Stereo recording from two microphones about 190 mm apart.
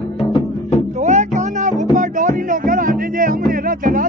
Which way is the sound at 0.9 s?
40° right (ahead or behind).